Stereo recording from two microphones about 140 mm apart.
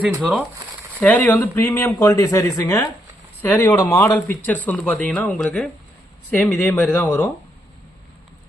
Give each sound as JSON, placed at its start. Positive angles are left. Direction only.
{"t": 0.2, "sound": "speech", "side_deg": 0}
{"t": 1.0, "sound": "speech", "side_deg": 15}